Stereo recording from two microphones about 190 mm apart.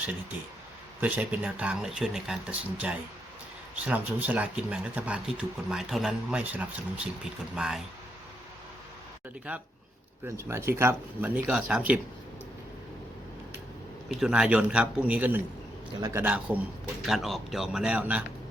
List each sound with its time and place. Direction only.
1.0 s speech: 5° right (ahead or behind)
10.2 s speech: 15° right (ahead or behind)
14.1 s speech: 5° right (ahead or behind)
15.9 s a man's voice: 25° right (ahead or behind)
16.1 s speech: 10° right (ahead or behind)